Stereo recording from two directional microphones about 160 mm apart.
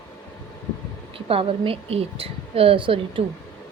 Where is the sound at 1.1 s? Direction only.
35° right (ahead or behind).